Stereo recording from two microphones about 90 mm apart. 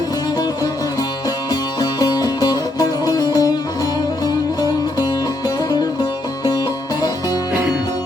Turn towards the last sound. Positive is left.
turn(degrees=45)  # may be behind; listen again after turning